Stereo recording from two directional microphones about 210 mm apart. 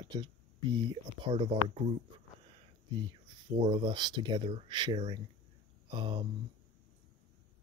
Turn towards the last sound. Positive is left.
turn(degrees=-20)  # may be behind; listen again after turning